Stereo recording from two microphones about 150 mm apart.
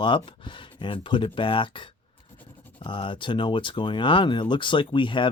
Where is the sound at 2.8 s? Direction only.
35° left (ahead or behind).